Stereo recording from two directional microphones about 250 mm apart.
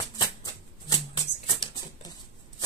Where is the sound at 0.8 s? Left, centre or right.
Centre.